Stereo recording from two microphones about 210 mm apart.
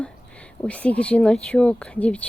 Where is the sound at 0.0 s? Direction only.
5° left (ahead or behind).